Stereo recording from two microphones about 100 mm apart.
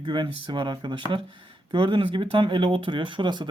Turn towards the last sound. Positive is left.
turn(degrees=-50)  # may be behind; listen again after turning